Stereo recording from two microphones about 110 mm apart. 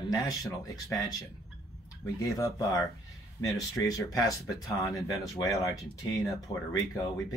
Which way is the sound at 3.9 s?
30° left (ahead or behind).